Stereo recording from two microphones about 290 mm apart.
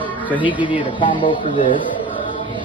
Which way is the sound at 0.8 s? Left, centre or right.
Centre.